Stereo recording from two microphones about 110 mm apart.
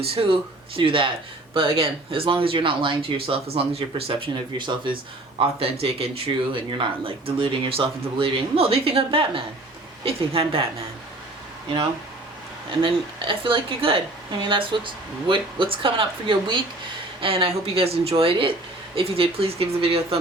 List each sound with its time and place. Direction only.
0.0 s speech: 65° right (ahead or behind)
0.8 s speech: 50° right (ahead or behind)
5.4 s speech: 65° right (ahead or behind)
12.8 s speech: 50° right (ahead or behind)